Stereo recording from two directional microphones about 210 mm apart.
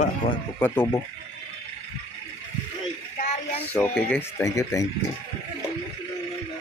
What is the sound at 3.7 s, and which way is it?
Speech, 5° left (ahead or behind).